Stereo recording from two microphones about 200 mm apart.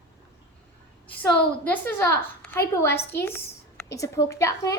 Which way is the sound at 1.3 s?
10° left (ahead or behind).